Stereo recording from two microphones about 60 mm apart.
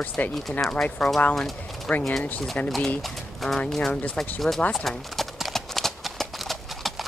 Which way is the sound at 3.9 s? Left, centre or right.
Left.